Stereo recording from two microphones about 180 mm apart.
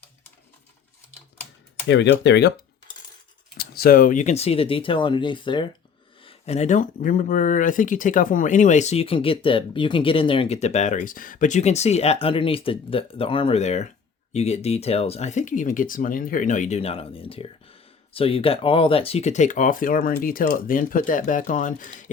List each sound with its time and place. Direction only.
1.9 s speech: 80° left
3.6 s speech: 55° left (ahead or behind)